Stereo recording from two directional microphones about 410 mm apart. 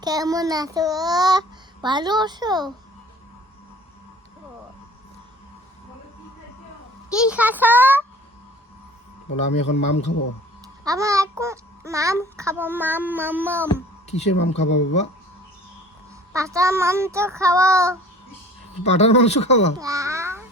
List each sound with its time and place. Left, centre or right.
0.0 s a child's voice: centre
7.1 s speech: centre
9.3 s speech: centre
9.6 s a man's voice: left
10.8 s a child's voice: centre
14.1 s speech: centre
16.3 s a child's voice: centre
18.8 s speech: centre
19.8 s a child's voice: centre